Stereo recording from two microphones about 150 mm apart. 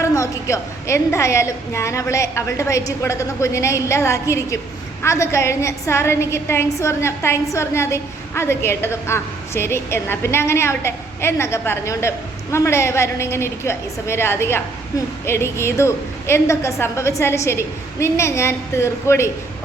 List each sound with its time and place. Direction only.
0.0 s a woman's voice: 20° left (ahead or behind)